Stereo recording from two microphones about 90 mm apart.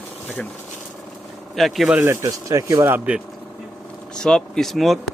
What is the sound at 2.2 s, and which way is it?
Speech, 35° right (ahead or behind).